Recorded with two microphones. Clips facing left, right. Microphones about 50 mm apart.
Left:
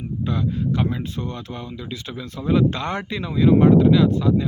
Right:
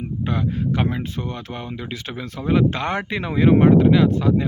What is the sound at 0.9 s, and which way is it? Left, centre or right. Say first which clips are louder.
Speech: right 1 dB; right.